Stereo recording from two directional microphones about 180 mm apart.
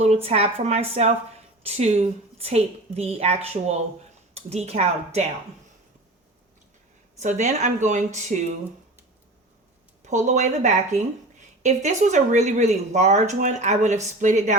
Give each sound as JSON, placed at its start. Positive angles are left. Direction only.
{"t": 0.0, "sound": "a woman's voice", "side_deg": -35}
{"t": 7.2, "sound": "a woman's voice", "side_deg": -40}
{"t": 10.0, "sound": "a woman's voice", "side_deg": -40}